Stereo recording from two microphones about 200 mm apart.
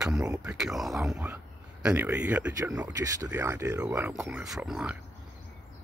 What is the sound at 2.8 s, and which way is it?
Speech, 15° right (ahead or behind).